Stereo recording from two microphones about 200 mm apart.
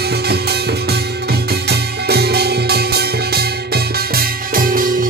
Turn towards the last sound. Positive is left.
turn(degrees=-45)  # may be behind; listen again after turning